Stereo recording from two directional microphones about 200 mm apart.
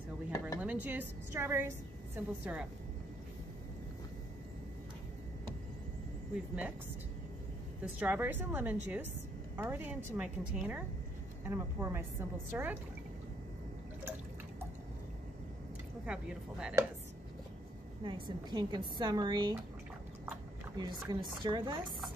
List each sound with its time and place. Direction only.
0.6 s a woman's voice: 10° right (ahead or behind)
6.3 s a woman's voice: 5° right (ahead or behind)
7.8 s a woman's voice: 10° right (ahead or behind)
16.1 s speech: 5° right (ahead or behind)
18.0 s a woman's voice: 25° right (ahead or behind)
20.7 s a woman's voice: 20° right (ahead or behind)